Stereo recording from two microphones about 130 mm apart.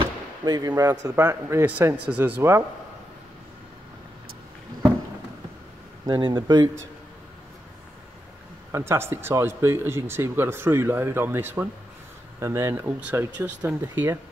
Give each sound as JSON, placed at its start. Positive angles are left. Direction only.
{"t": 0.5, "sound": "a man's voice", "side_deg": -30}
{"t": 6.0, "sound": "speech", "side_deg": -35}
{"t": 8.7, "sound": "speech", "side_deg": -20}